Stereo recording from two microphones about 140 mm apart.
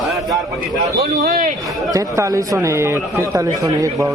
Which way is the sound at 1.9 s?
25° right (ahead or behind).